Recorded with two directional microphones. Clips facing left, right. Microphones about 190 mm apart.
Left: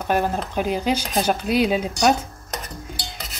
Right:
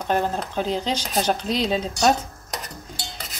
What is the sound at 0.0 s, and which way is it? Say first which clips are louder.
Speech: left 1 dB; 10° left (ahead or behind).